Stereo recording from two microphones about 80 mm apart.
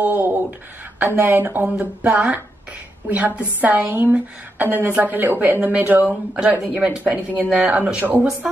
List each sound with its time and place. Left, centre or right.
0.0 s a woman's voice: right
7.4 s speech: centre
7.7 s speech: centre